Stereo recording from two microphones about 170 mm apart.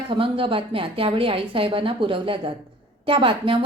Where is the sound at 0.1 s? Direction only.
30° right (ahead or behind).